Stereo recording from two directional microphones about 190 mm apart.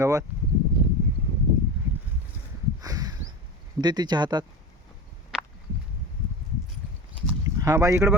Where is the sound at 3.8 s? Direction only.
20° right (ahead or behind).